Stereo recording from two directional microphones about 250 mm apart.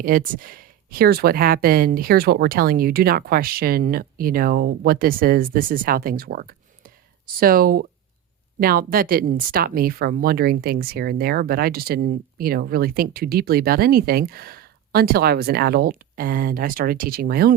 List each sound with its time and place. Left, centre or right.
0.0 s speech: right